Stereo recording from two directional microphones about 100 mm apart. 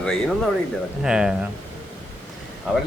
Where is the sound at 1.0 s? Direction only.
5° right (ahead or behind).